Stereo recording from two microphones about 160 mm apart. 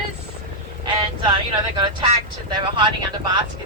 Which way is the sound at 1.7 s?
30° right (ahead or behind).